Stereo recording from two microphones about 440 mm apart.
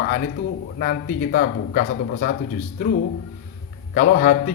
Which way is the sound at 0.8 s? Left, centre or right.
Left.